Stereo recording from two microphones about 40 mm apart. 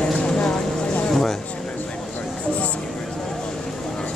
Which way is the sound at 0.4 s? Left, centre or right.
Left.